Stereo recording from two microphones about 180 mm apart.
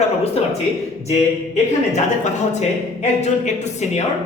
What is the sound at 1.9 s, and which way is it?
Speech, 40° left (ahead or behind).